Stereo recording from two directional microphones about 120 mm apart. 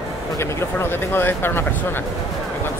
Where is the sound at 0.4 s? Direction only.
20° left (ahead or behind).